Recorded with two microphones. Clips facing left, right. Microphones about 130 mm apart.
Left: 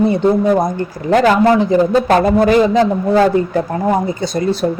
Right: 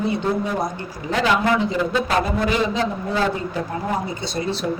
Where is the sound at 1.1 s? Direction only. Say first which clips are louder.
Left 8 dB; 50° left (ahead or behind).